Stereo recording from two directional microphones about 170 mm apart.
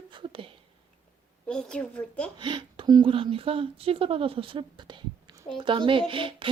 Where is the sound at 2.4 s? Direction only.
25° right (ahead or behind).